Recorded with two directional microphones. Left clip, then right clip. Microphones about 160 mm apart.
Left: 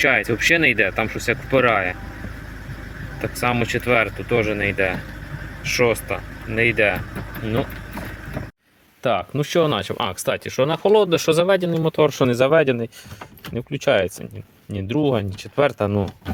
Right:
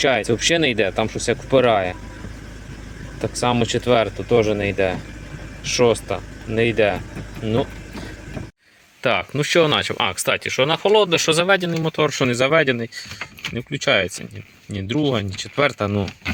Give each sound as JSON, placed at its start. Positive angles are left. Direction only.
{"t": 0.0, "sound": "speech", "side_deg": -20}
{"t": 3.8, "sound": "speech", "side_deg": -35}
{"t": 6.1, "sound": "speech", "side_deg": -35}
{"t": 9.0, "sound": "speech", "side_deg": 5}